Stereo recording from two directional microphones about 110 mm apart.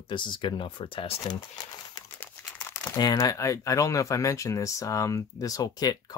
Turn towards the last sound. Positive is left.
turn(degrees=35)  # may be behind; listen again after turning